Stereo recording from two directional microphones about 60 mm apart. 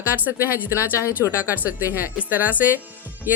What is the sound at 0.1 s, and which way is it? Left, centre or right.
A woman's voice, right.